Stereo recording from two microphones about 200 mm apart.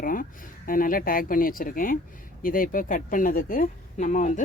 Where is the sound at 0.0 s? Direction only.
45° left (ahead or behind).